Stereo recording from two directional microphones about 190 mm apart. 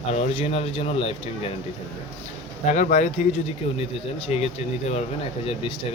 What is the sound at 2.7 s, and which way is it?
Speech, 40° left (ahead or behind).